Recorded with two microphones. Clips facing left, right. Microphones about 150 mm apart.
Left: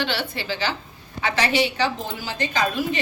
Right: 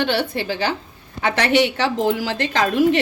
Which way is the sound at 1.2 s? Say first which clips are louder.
Right 4 dB; 65° right (ahead or behind).